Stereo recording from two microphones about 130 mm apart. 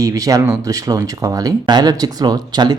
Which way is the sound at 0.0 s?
25° right (ahead or behind).